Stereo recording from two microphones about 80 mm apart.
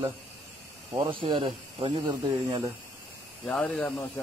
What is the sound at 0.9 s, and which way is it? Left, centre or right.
Speech, right.